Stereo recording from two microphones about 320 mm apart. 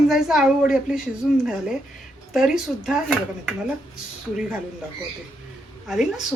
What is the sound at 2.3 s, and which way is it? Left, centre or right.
Speech, centre.